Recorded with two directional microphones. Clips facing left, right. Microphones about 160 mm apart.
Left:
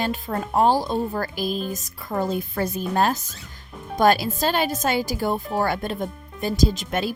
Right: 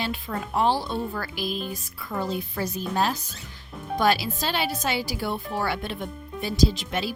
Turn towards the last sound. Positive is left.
turn(degrees=50)  # may be behind; listen again after turning